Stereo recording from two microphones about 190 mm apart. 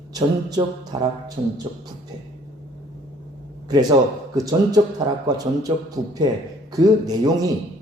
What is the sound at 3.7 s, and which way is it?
A man's voice, 20° right (ahead or behind).